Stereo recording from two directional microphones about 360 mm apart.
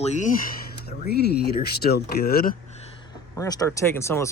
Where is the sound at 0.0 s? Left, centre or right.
Centre.